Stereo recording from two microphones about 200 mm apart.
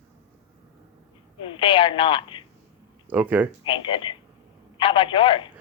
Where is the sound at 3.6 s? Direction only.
25° left (ahead or behind).